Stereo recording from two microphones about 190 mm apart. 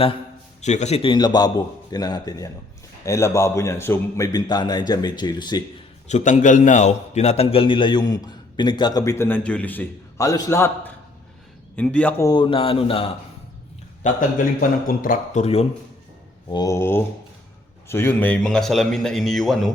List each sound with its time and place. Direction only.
0.6 s a man's voice: 35° left (ahead or behind); by 5.6 s 20° left (ahead or behind)
6.1 s a man's voice: 40° left (ahead or behind); by 12.1 s 5° left (ahead or behind)
12.2 s a man's voice: 25° left (ahead or behind)
14.0 s speech: 45° left (ahead or behind)
16.5 s a man's voice: 20° left (ahead or behind); by 19.7 s centre (ahead or behind)